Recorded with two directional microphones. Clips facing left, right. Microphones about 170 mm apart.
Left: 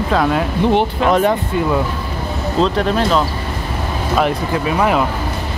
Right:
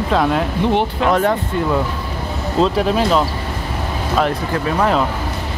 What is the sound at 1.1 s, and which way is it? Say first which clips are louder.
Speech: left 2 dB; 15° left (ahead or behind).